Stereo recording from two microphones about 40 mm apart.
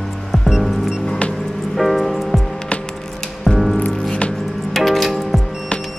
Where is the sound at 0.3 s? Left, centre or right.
Centre.